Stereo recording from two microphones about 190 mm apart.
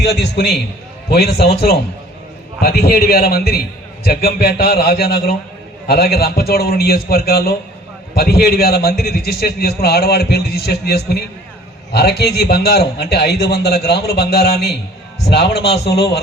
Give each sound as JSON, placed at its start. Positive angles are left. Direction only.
{"t": 0.1, "sound": "a man's voice", "side_deg": 60}